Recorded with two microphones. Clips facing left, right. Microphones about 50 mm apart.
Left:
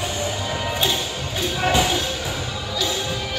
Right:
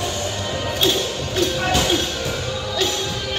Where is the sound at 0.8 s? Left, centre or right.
Left.